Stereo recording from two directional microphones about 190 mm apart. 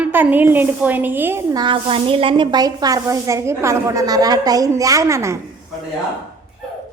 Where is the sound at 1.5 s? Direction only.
25° right (ahead or behind).